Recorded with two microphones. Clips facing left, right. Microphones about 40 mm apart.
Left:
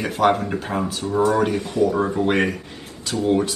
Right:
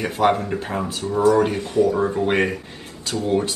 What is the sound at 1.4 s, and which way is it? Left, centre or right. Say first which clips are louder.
Speech: right 1 dB; right.